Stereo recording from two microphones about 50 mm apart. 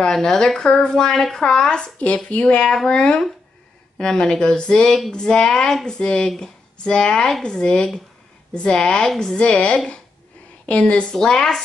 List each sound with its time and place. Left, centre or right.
0.0 s speech: centre
2.0 s a woman's voice: left
2.4 s a woman's voice: centre